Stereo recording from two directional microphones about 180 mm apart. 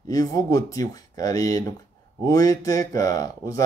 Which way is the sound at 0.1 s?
20° left (ahead or behind).